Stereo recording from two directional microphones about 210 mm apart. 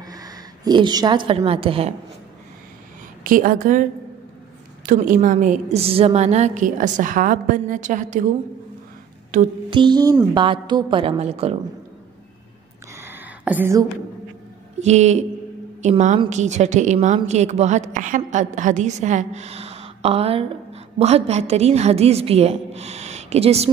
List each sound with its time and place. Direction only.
0.0 s a woman's voice: 15° right (ahead or behind)
3.3 s a woman's voice: 40° right (ahead or behind)
4.8 s a woman's voice: 40° right (ahead or behind)
9.3 s a woman's voice: 40° right (ahead or behind)
9.7 s a woman's voice: 20° right (ahead or behind)
12.9 s a sound: 10° right (ahead or behind)
14.8 s a woman's voice: 30° right (ahead or behind)